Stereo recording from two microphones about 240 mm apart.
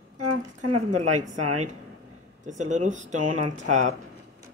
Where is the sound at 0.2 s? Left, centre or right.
Right.